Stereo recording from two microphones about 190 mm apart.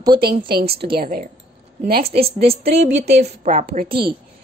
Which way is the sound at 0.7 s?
55° right (ahead or behind).